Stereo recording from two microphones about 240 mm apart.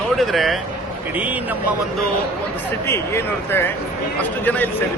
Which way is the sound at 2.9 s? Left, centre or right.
Centre.